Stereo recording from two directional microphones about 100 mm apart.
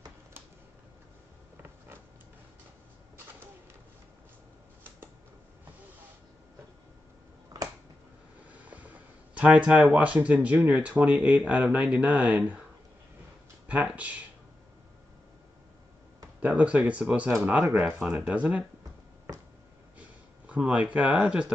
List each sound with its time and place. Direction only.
8.5 s a sound: 15° right (ahead or behind)
9.9 s speech: 15° right (ahead or behind)
13.7 s speech: 15° right (ahead or behind)
16.3 s speech: 15° right (ahead or behind)
17.6 s speech: 30° right (ahead or behind)
17.9 s speech: 5° right (ahead or behind)
20.0 s speech: 15° right (ahead or behind)